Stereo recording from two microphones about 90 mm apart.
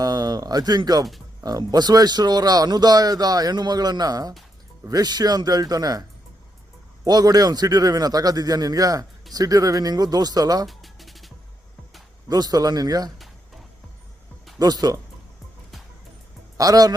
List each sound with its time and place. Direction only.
0.0 s speech: 45° right (ahead or behind)
10.7 s music: centre (ahead or behind)
12.3 s speech: 45° right (ahead or behind)
14.6 s speech: 45° right (ahead or behind)
16.6 s speech: 45° right (ahead or behind)